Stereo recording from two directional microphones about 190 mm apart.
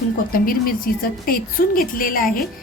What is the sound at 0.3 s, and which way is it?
A woman's voice, 50° left (ahead or behind).